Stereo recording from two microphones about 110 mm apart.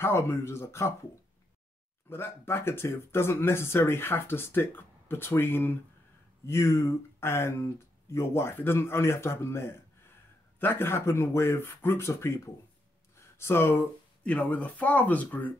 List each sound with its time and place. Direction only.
0.0 s speech: 20° left (ahead or behind)
2.0 s speech: 20° left (ahead or behind)